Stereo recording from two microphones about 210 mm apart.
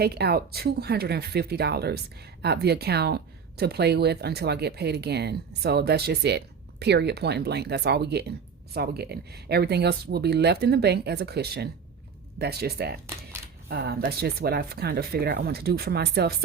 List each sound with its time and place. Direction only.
0.0 s speech: 50° right (ahead or behind)